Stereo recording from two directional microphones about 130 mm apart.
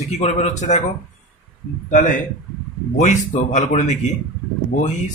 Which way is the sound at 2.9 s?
70° left (ahead or behind).